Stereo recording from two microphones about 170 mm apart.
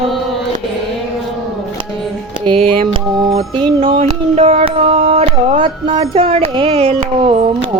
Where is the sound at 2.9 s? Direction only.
30° right (ahead or behind).